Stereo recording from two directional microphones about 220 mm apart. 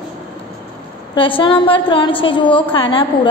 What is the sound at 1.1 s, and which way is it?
A woman's voice, 25° left (ahead or behind).